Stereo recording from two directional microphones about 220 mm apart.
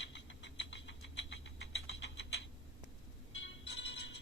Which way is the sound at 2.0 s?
55° left (ahead or behind).